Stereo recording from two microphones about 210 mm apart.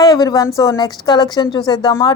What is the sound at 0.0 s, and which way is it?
A woman's voice, 20° left (ahead or behind).